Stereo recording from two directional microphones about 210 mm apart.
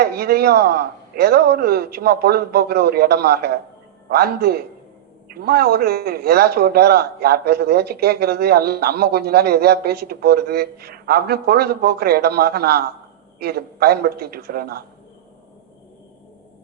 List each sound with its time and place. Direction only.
0.0 s a man's voice: 50° right (ahead or behind)